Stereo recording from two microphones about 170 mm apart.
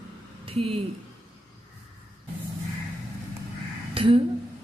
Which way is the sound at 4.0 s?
30° right (ahead or behind).